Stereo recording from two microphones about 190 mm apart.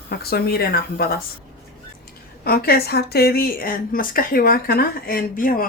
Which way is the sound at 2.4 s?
55° left (ahead or behind).